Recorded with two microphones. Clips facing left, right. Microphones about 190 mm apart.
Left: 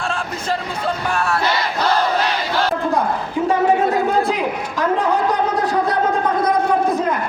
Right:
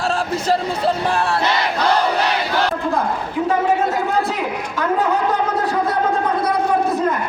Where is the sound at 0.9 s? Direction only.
30° right (ahead or behind).